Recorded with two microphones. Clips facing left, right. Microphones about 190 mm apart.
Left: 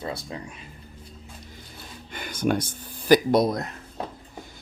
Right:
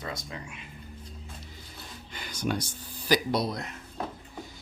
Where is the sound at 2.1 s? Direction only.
55° left (ahead or behind).